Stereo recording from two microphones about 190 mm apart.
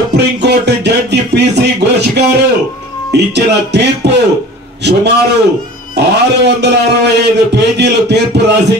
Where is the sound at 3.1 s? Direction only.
65° right (ahead or behind).